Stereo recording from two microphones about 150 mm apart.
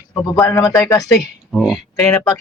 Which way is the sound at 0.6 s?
25° left (ahead or behind).